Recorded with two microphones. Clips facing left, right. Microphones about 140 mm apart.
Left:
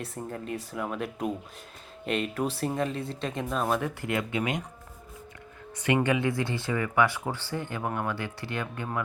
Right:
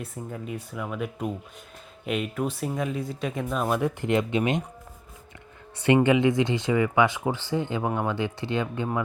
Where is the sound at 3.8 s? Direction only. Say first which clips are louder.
Right 6 dB; 20° right (ahead or behind).